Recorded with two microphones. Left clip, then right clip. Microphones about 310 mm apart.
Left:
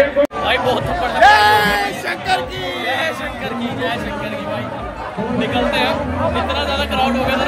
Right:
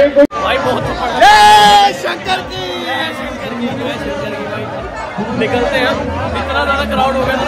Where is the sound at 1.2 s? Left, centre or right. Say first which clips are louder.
Right 5 dB; right.